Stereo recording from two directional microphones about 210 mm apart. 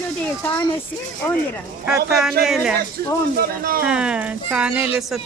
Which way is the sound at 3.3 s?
45° right (ahead or behind).